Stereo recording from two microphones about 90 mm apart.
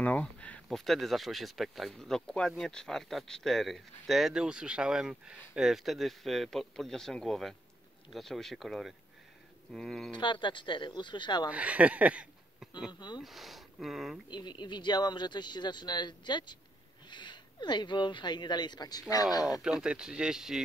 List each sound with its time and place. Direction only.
0.0 s a sound: 15° left (ahead or behind)
0.7 s speech: centre (ahead or behind)
10.1 s speech: 60° left (ahead or behind)
11.5 s speech: 15° right (ahead or behind)
13.2 s speech: centre (ahead or behind)
14.3 s speech: 55° left (ahead or behind)
19.6 s speech: 10° right (ahead or behind)